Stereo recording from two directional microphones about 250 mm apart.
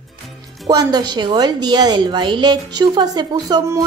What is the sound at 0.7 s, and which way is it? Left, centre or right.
A woman's voice, centre.